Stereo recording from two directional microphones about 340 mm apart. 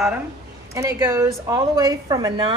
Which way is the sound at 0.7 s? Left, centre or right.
Centre.